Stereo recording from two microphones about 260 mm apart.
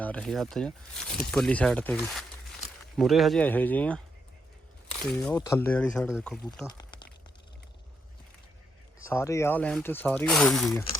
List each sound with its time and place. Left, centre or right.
0.0 s speech: centre
6.7 s a sound: centre
9.0 s speech: centre